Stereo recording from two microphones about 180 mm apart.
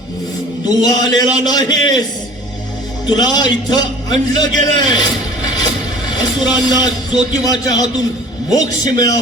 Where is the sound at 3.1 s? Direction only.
25° left (ahead or behind).